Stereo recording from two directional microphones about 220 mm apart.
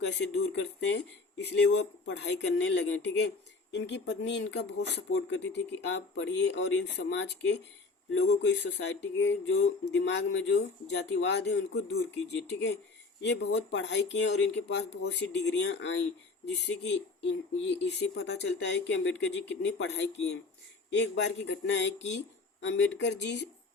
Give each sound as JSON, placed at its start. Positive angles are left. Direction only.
{"t": 0.0, "sound": "speech", "side_deg": 50}
{"t": 5.9, "sound": "speech", "side_deg": 55}